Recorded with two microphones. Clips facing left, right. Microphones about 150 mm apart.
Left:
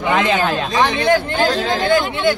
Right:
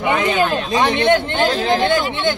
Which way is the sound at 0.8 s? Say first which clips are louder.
Right 2 dB; 25° right (ahead or behind).